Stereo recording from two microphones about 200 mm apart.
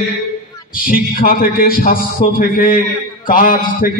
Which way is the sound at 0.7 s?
45° left (ahead or behind).